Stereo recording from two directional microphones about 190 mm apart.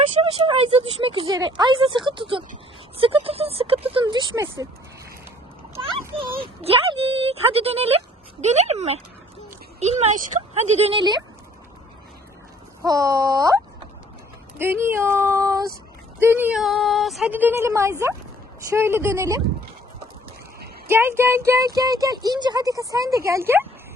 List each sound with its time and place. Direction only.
0.2 s speech: 30° right (ahead or behind)
6.1 s speech: 25° right (ahead or behind)
10.0 s speech: 35° right (ahead or behind)
12.8 s a woman's voice: 15° right (ahead or behind)
14.6 s a woman's voice: 10° right (ahead or behind)
20.8 s a woman's voice: 10° right (ahead or behind)